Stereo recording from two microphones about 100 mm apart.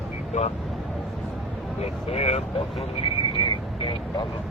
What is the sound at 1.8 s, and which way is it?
Speech, 90° left.